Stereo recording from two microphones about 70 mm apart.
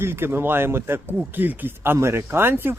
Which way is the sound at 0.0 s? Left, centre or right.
Right.